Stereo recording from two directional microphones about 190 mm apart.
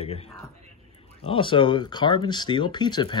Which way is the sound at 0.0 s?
30° left (ahead or behind).